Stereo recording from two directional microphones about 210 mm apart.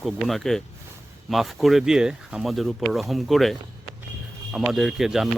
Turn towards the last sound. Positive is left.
turn(degrees=0)  # may be behind; listen again after turning